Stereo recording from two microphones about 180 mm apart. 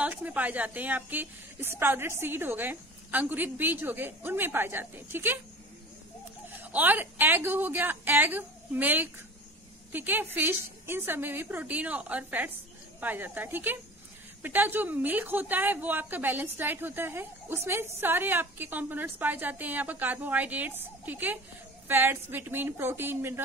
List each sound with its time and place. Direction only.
0.0 s a woman's voice: 10° right (ahead or behind)
6.5 s a woman's voice: 10° right (ahead or behind)